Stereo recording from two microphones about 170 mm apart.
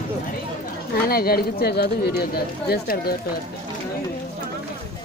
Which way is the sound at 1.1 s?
65° left (ahead or behind).